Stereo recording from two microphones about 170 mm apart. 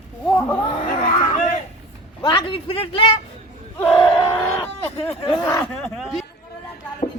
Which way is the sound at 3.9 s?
30° left (ahead or behind).